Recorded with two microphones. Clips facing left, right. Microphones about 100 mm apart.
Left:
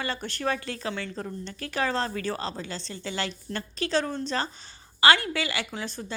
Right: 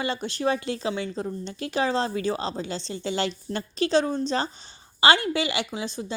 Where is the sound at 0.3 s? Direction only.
25° right (ahead or behind).